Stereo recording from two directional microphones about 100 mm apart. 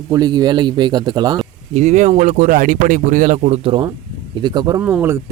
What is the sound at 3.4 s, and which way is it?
Speech, 80° right.